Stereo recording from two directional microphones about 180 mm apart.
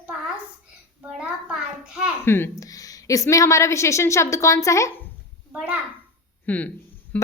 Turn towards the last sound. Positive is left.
turn(degrees=5)  # may be behind; listen again after turning